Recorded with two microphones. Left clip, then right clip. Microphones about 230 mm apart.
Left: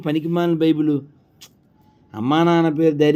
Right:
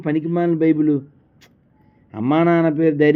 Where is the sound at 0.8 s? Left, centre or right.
Centre.